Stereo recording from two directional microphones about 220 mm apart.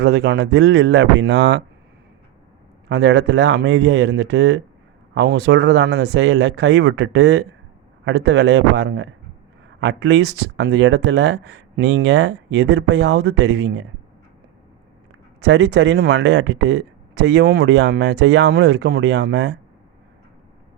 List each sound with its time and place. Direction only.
0.0 s speech: 50° right (ahead or behind)
2.9 s speech: 50° right (ahead or behind)
15.4 s speech: 50° right (ahead or behind)